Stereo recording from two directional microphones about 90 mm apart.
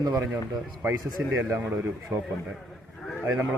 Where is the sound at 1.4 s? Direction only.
25° right (ahead or behind).